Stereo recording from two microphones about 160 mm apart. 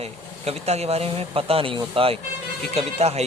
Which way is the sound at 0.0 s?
40° right (ahead or behind).